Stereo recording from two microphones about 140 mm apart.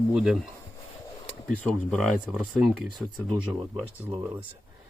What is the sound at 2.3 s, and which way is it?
Speech, centre (ahead or behind).